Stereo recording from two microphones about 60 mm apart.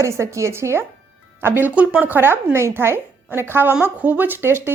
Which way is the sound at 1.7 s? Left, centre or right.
Right.